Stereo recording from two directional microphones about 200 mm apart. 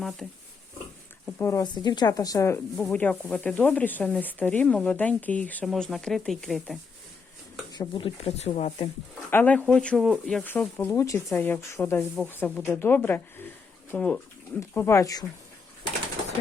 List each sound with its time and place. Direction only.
0.2 s speech: centre (ahead or behind)
1.4 s speech: 15° left (ahead or behind)
2.7 s speech: 5° left (ahead or behind)
7.7 s speech: 20° left (ahead or behind)
9.3 s speech: 10° left (ahead or behind)